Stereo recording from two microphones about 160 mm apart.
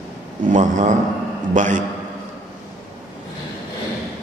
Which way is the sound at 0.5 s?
50° right (ahead or behind).